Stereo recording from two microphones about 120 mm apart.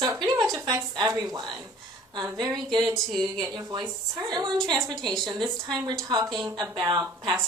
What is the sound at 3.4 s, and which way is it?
A woman's voice, 35° right (ahead or behind).